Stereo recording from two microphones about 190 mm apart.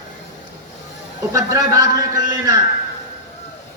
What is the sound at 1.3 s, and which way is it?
Speech, 20° right (ahead or behind).